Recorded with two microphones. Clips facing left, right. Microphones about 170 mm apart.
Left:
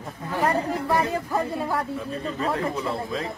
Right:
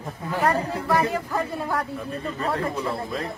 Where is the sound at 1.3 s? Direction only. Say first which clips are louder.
Left 1 dB; 15° left (ahead or behind).